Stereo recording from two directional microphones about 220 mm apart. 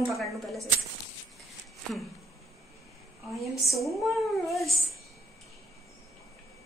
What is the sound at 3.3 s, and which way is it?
Speech, centre (ahead or behind).